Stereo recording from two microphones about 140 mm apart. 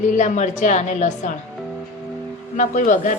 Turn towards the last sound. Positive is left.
turn(degrees=70)  # may be behind; listen again after turning